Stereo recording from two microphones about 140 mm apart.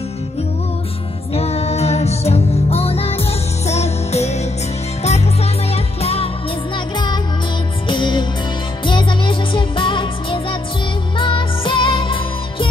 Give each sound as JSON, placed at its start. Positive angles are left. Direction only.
{"t": 1.3, "sound": "music", "side_deg": 50}
{"t": 7.9, "sound": "music", "side_deg": 35}